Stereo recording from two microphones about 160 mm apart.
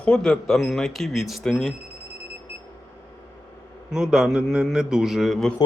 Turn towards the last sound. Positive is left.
turn(degrees=0)  # may be behind; listen again after turning